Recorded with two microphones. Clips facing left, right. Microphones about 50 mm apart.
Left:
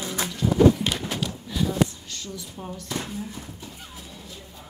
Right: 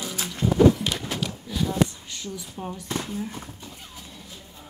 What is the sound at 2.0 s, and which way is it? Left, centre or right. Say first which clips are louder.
A woman's voice: right 1 dB; centre.